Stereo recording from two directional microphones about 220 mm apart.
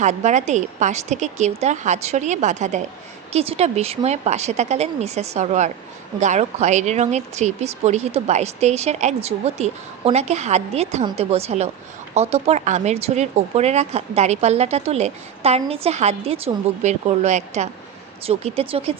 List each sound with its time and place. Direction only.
0.0 s speech: 30° right (ahead or behind)